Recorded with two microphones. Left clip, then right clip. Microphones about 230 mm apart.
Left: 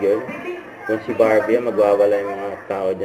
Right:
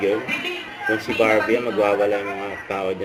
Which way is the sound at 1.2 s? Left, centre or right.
Right.